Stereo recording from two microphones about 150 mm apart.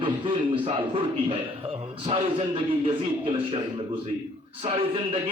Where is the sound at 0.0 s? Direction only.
35° right (ahead or behind).